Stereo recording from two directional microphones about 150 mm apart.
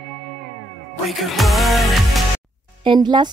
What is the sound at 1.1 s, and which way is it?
Music, centre (ahead or behind).